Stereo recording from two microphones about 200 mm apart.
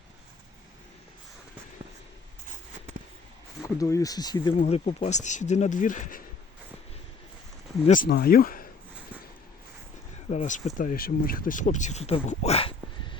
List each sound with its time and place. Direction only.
3.6 s speech: 15° left (ahead or behind)
4.6 s speech: 35° left (ahead or behind)
7.9 s speech: 45° left (ahead or behind)
10.2 s speech: 35° left (ahead or behind)